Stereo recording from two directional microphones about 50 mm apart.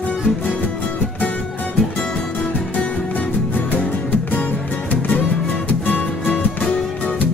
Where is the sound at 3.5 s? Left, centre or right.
Left.